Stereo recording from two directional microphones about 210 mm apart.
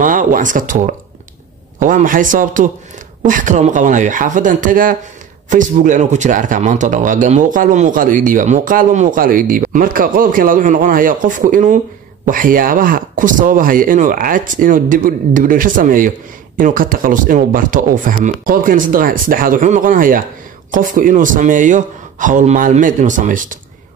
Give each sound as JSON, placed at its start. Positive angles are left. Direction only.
{"t": 0.0, "sound": "speech", "side_deg": -40}